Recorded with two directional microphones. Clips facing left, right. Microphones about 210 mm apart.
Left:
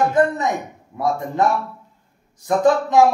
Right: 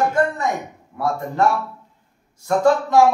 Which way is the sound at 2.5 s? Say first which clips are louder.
Even; 20° left (ahead or behind).